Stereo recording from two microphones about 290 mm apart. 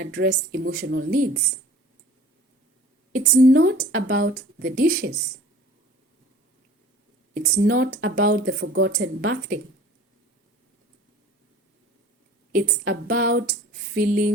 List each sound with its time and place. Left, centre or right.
0.0 s speech: right
3.1 s a woman's voice: right
3.4 s speech: right
7.3 s speech: right
8.7 s a woman's voice: right
12.9 s a sound: right